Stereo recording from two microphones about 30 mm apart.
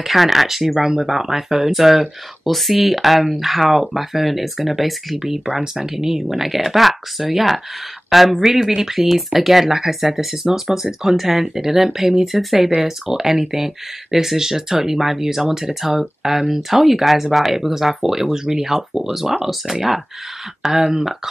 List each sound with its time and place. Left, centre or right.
0.0 s speech: centre
0.7 s speech: centre
8.6 s speech: centre